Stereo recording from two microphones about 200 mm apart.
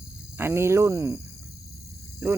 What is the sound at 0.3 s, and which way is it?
Speech, 10° right (ahead or behind).